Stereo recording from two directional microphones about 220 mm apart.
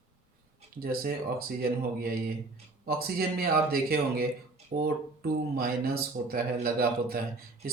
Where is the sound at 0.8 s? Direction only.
45° right (ahead or behind).